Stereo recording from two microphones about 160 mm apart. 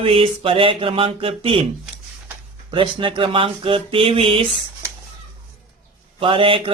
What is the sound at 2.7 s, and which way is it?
Speech, 30° right (ahead or behind).